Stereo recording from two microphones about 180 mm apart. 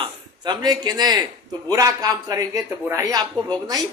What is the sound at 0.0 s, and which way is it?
A man's voice, 25° right (ahead or behind).